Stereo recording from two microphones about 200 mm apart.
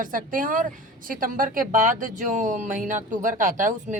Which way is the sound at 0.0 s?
40° right (ahead or behind).